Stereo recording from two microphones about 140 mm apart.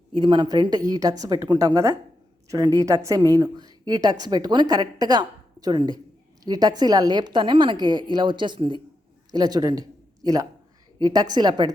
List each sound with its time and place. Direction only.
0.1 s a woman's voice: 35° right (ahead or behind)
11.0 s a woman's voice: 30° right (ahead or behind)